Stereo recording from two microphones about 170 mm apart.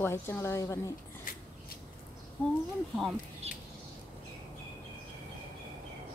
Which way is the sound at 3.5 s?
35° right (ahead or behind).